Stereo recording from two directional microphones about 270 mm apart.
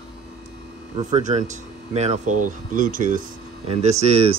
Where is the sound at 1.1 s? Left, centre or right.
Right.